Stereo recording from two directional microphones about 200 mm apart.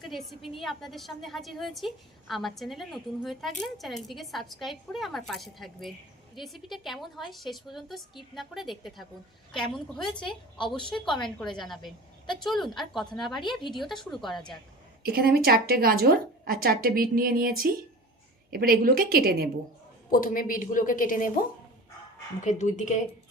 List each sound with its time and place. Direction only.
0.0 s a woman's voice: centre (ahead or behind)
10.8 s a woman's voice: 25° left (ahead or behind)
11.2 s a woman's voice: centre (ahead or behind)
13.4 s a woman's voice: 25° left (ahead or behind)
13.7 s a woman's voice: centre (ahead or behind)
15.0 s a woman's voice: 50° right (ahead or behind)
20.1 s a woman's voice: 45° left (ahead or behind)
22.4 s speech: 35° left (ahead or behind)